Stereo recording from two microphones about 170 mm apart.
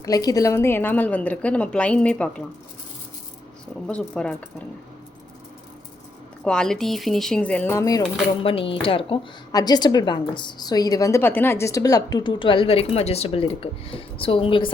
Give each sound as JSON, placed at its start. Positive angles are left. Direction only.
{"t": 0.0, "sound": "a woman's voice", "side_deg": 20}
{"t": 3.8, "sound": "speech", "side_deg": 5}
{"t": 6.4, "sound": "speech", "side_deg": 5}
{"t": 8.4, "sound": "a woman's voice", "side_deg": 30}